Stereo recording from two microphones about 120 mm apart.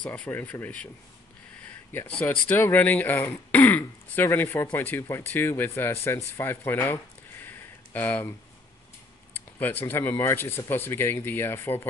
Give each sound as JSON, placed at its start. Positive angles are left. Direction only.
{"t": 0.0, "sound": "speech", "side_deg": 10}
{"t": 1.9, "sound": "speech", "side_deg": 15}
{"t": 7.4, "sound": "a sound", "side_deg": 15}
{"t": 9.6, "sound": "speech", "side_deg": 15}